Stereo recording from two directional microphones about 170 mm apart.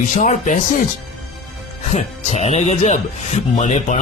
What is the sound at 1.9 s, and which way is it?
Speech, 40° left (ahead or behind).